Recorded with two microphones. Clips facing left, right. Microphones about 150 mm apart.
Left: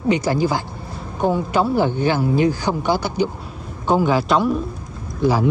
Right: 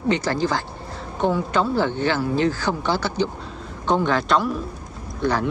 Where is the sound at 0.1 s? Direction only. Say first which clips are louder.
Left 3 dB; 10° left (ahead or behind).